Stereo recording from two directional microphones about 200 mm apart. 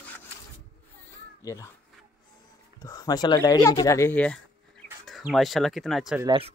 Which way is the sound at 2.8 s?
20° left (ahead or behind).